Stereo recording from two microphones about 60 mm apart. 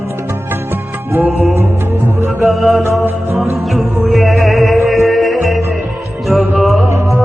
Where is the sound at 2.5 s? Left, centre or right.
Centre.